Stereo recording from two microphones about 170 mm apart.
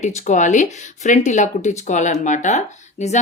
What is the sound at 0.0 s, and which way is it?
A woman's voice, 45° left (ahead or behind).